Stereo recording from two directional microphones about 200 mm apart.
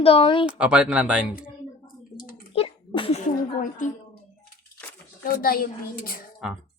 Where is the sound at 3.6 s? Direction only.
40° left (ahead or behind).